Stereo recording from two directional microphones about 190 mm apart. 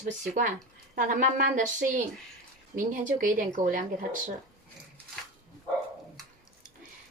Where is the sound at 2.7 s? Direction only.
45° right (ahead or behind).